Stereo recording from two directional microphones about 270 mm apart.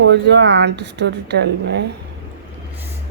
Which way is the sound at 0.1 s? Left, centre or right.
Right.